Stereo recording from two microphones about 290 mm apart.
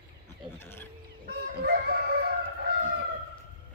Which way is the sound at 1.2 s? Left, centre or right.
Right.